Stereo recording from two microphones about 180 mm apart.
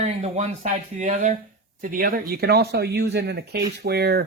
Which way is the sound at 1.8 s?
50° right (ahead or behind).